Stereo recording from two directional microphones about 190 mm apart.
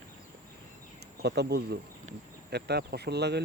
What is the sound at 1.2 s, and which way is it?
Speech, 60° right (ahead or behind).